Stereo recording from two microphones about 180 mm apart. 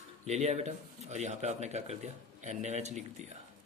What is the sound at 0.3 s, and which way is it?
Speech, 35° right (ahead or behind).